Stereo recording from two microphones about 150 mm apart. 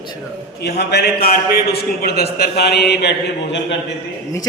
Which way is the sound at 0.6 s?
90° left.